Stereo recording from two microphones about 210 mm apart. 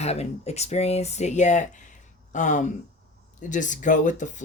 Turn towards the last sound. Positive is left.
turn(degrees=35)  # may be behind; listen again after turning